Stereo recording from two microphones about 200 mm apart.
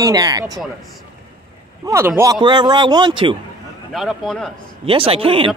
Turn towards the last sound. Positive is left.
turn(degrees=-25)  # may be behind; listen again after turning